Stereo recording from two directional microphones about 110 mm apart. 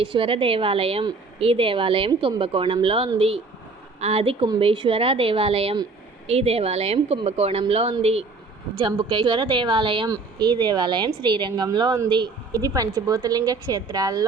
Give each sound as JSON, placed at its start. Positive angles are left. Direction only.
{"t": 0.0, "sound": "a woman's voice", "side_deg": -55}
{"t": 8.9, "sound": "a woman's voice", "side_deg": -45}
{"t": 10.1, "sound": "a woman's voice", "side_deg": -40}